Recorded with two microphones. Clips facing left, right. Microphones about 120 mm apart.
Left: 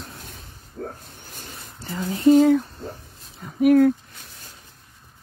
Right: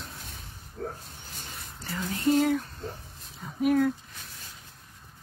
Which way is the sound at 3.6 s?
60° left (ahead or behind).